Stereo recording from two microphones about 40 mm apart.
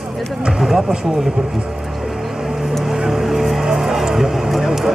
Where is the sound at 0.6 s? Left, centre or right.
Centre.